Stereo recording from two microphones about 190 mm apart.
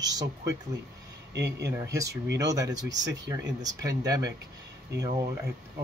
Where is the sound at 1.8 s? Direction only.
15° right (ahead or behind).